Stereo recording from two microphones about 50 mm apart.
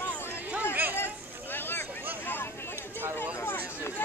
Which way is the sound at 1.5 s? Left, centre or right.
Left.